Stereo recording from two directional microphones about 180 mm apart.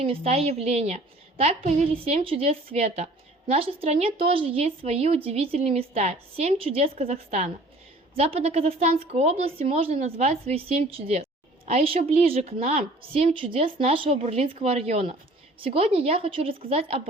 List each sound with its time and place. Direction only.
0.0 s a woman's voice: 30° right (ahead or behind)